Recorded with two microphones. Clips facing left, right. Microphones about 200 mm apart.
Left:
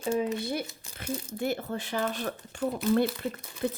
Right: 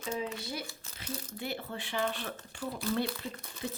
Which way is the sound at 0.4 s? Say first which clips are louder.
Left 7 dB; 55° left (ahead or behind).